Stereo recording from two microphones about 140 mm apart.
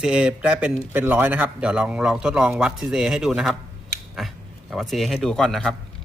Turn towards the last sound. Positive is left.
turn(degrees=0)  # may be behind; listen again after turning